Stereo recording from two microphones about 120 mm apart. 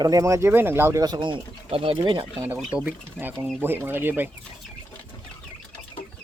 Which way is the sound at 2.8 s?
15° right (ahead or behind).